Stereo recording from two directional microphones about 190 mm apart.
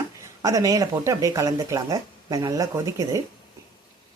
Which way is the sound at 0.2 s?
15° right (ahead or behind).